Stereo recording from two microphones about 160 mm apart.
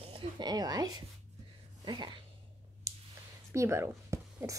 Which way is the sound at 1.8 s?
25° right (ahead or behind).